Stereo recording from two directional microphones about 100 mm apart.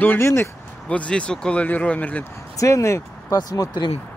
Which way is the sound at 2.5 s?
30° left (ahead or behind).